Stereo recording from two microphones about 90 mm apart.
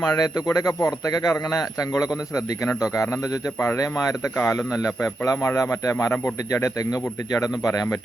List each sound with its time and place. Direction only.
0.1 s a man's voice: 45° left (ahead or behind)